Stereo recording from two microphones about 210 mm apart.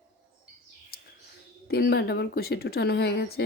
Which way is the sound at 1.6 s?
50° left (ahead or behind).